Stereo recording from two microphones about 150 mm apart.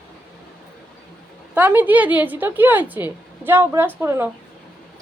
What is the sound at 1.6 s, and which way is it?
A woman's voice, 10° right (ahead or behind).